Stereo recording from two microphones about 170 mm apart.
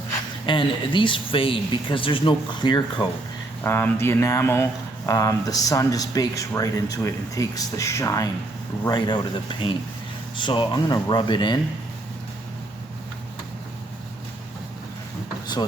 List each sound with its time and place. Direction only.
0.4 s speech: 30° left (ahead or behind)
3.6 s speech: 15° left (ahead or behind)